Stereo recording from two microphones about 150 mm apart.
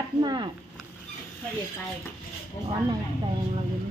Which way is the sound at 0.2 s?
30° right (ahead or behind).